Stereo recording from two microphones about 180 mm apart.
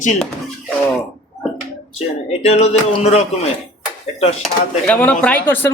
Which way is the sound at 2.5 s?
35° left (ahead or behind).